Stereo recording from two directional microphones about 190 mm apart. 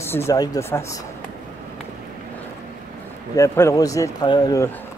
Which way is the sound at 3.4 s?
15° left (ahead or behind).